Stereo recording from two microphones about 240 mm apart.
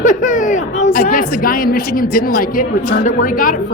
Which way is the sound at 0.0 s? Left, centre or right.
Left.